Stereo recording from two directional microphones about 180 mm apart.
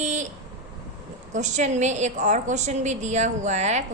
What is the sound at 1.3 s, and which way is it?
A woman's voice, 40° right (ahead or behind).